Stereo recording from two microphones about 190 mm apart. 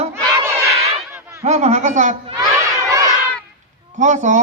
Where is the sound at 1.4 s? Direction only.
35° right (ahead or behind).